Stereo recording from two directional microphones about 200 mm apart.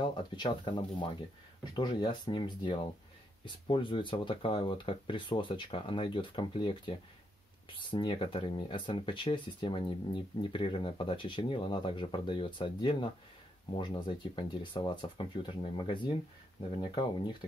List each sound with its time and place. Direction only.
0.0 s speech: 25° left (ahead or behind)